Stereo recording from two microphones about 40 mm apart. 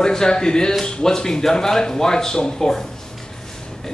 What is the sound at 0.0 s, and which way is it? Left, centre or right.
Speech, centre.